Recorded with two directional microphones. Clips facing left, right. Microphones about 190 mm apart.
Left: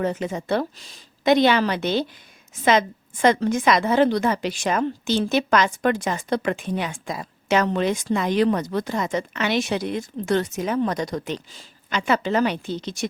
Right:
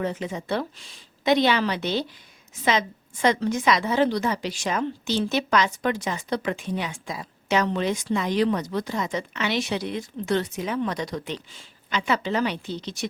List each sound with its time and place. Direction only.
0.0 s a woman's voice: 45° left (ahead or behind)